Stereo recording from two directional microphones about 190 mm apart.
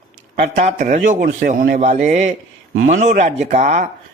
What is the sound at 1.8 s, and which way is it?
A man's voice, 40° right (ahead or behind).